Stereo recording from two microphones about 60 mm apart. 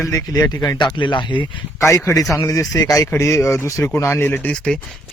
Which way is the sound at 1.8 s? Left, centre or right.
Left.